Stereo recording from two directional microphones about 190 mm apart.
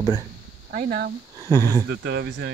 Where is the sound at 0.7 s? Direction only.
50° right (ahead or behind).